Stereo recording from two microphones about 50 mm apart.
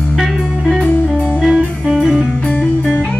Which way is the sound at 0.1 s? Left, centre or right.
Centre.